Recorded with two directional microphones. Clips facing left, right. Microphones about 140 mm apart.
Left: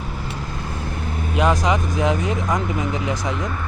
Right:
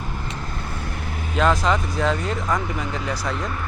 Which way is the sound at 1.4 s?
15° left (ahead or behind).